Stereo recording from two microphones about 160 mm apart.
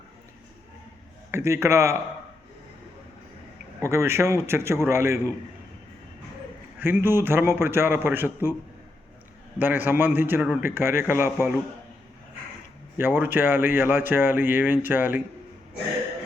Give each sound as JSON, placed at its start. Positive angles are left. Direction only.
{"t": 1.3, "sound": "speech", "side_deg": -15}
{"t": 3.8, "sound": "speech", "side_deg": -15}
{"t": 6.7, "sound": "speech", "side_deg": -15}
{"t": 9.6, "sound": "speech", "side_deg": -10}
{"t": 13.0, "sound": "speech", "side_deg": -10}